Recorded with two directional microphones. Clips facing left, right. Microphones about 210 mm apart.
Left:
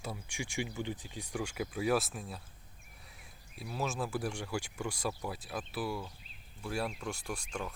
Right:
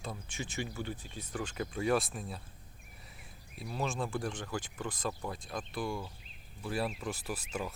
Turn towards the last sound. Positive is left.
turn(degrees=-5)  # may be behind; listen again after turning